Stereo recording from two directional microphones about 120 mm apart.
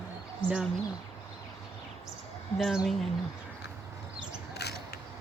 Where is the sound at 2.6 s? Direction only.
Centre (ahead or behind).